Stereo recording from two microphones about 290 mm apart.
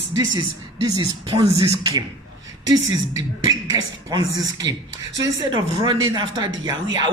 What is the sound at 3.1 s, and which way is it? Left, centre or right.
Speech, centre.